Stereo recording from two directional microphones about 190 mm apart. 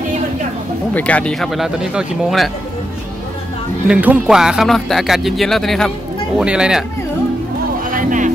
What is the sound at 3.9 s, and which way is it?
Speech, 5° right (ahead or behind).